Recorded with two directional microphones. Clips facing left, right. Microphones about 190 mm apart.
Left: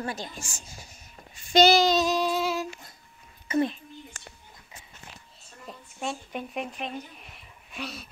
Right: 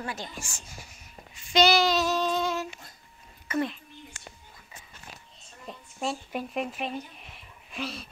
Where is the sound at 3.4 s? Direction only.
20° left (ahead or behind).